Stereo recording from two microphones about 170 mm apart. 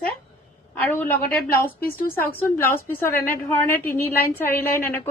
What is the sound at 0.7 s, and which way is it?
Speech, 10° left (ahead or behind).